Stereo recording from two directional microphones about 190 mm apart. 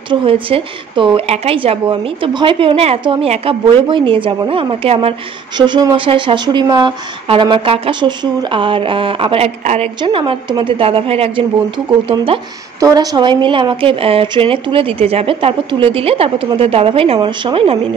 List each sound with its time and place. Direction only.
0.1 s a woman's voice: 30° right (ahead or behind)
12.8 s a woman's voice: 20° right (ahead or behind)